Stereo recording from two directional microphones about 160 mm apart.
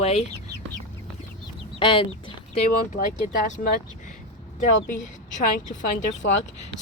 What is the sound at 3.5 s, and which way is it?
Speech, 50° left (ahead or behind).